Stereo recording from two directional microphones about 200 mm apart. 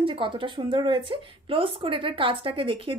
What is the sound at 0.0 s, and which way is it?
Speech, 25° right (ahead or behind).